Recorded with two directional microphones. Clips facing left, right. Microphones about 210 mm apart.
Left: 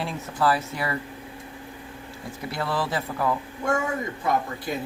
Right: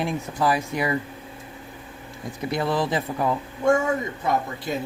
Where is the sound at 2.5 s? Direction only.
20° right (ahead or behind).